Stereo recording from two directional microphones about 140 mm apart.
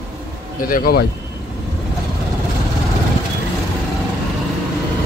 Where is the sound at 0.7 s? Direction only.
90° left.